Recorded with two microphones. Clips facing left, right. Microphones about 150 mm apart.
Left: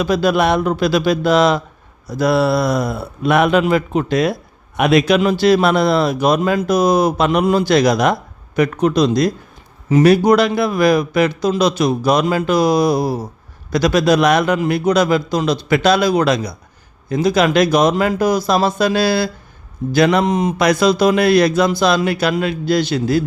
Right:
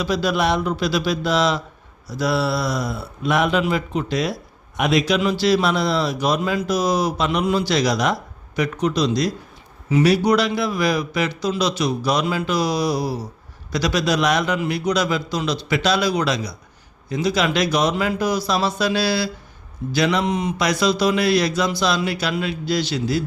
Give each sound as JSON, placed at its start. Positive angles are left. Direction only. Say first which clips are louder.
{"t": 0.0, "sound": "a man's voice", "louder": "left 5 dB", "side_deg": 55}